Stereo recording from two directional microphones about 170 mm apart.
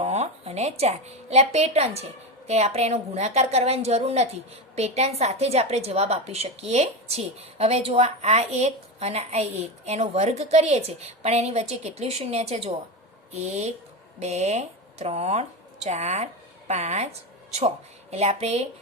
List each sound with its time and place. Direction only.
0.0 s a woman's voice: 40° right (ahead or behind)
18.1 s a woman's voice: 40° right (ahead or behind)